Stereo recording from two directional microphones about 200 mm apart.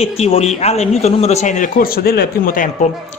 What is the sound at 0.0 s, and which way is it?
Speech, 30° left (ahead or behind).